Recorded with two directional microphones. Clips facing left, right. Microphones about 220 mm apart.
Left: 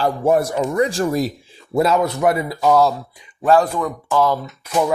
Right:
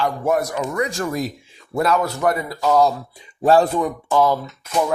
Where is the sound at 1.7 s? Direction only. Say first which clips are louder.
Left 3 dB; 25° left (ahead or behind).